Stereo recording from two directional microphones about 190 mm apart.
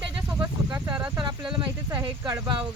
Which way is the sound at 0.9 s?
5° right (ahead or behind).